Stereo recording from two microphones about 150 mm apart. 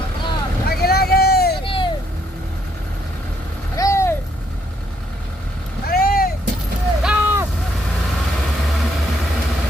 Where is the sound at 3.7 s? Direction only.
20° left (ahead or behind).